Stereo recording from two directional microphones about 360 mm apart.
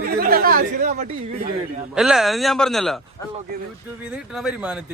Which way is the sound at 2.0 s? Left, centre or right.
Centre.